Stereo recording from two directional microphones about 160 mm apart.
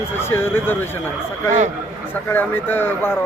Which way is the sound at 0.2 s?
15° left (ahead or behind).